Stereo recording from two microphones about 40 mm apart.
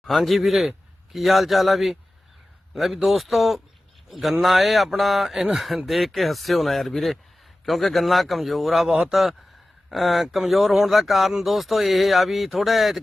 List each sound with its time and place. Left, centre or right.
0.1 s speech: centre
8.9 s a man's voice: centre
9.9 s speech: centre